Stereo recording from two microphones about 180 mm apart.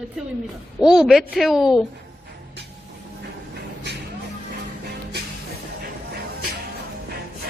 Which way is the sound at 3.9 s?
75° right (ahead or behind).